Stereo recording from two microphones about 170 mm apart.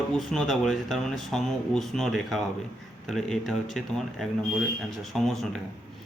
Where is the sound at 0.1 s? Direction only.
Centre (ahead or behind).